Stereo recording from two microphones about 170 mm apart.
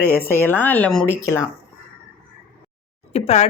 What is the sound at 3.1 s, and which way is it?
Speech, 40° left (ahead or behind).